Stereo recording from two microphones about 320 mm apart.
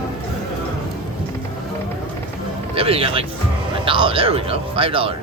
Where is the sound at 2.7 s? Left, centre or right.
Centre.